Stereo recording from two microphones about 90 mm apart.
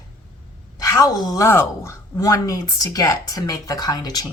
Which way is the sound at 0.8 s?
40° left (ahead or behind).